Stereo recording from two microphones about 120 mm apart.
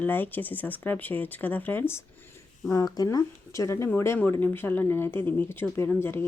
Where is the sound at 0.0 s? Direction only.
15° left (ahead or behind).